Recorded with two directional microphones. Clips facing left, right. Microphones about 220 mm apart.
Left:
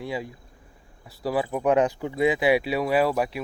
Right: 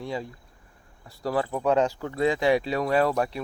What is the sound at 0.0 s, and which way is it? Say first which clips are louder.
Speech: left 1 dB; 5° left (ahead or behind).